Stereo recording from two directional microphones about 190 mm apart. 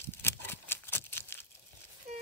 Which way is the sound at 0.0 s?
10° left (ahead or behind).